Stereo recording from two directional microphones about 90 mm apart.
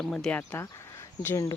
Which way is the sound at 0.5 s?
25° left (ahead or behind).